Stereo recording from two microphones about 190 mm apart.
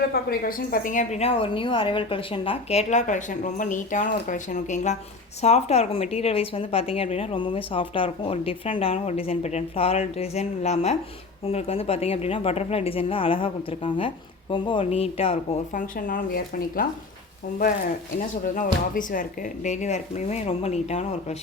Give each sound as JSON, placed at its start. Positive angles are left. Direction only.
{"t": 0.1, "sound": "a woman's voice", "side_deg": 50}
{"t": 15.7, "sound": "speech", "side_deg": 45}
{"t": 18.5, "sound": "a woman's voice", "side_deg": 45}